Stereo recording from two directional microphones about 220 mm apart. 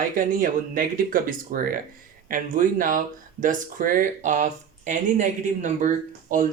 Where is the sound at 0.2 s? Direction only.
40° right (ahead or behind).